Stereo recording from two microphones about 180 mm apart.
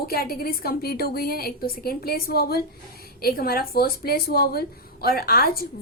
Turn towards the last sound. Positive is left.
turn(degrees=60)  # may be behind; listen again after turning